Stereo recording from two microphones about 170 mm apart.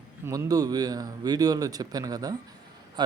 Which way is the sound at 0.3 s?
20° right (ahead or behind).